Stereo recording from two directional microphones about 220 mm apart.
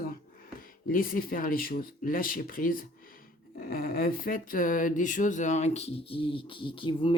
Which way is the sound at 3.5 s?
40° left (ahead or behind).